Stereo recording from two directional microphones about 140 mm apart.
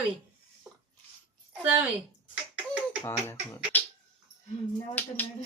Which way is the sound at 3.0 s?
20° left (ahead or behind).